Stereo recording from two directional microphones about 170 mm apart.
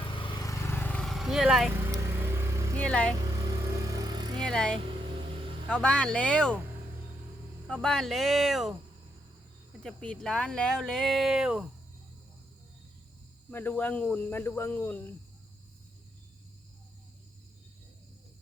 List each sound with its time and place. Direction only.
0.1 s vehicle: 30° left (ahead or behind); by 1.8 s 5° right (ahead or behind)
1.8 s vehicle: 15° right (ahead or behind)
2.7 s speech: 5° left (ahead or behind)
3.4 s vehicle: 20° right (ahead or behind)
4.4 s vehicle: 5° left (ahead or behind)
5.6 s speech: 5° left (ahead or behind)
7.7 s speech: centre (ahead or behind)
9.8 s speech: 5° left (ahead or behind)
13.5 s speech: 10° left (ahead or behind)